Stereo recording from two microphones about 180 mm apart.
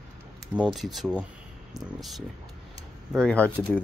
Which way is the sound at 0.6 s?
Centre (ahead or behind).